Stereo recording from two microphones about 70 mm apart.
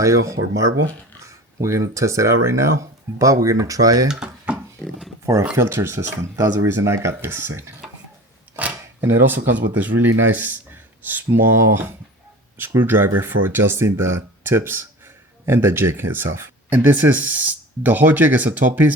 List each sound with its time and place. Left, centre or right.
0.0 s speech: right
4.1 s dishes: centre
5.2 s speech: right
5.5 s speech: right
8.5 s cutlery: right
9.0 s speech: right